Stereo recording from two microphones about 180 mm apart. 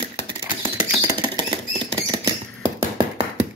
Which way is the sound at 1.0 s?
25° right (ahead or behind).